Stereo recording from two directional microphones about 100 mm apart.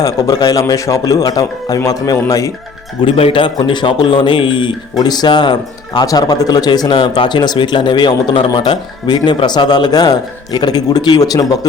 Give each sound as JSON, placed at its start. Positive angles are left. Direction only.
{"t": 0.0, "sound": "a man's voice", "side_deg": 35}
{"t": 3.0, "sound": "speech", "side_deg": 65}
{"t": 4.9, "sound": "speech", "side_deg": 45}